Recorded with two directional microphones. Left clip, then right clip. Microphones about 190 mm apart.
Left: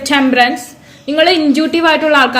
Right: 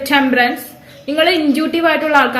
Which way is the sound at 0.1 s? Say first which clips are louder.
Left 2 dB; 35° left (ahead or behind).